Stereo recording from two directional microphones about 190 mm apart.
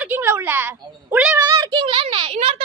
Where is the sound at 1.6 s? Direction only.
25° right (ahead or behind).